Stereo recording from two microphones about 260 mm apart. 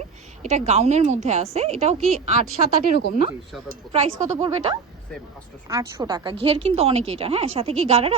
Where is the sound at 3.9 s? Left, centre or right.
Right.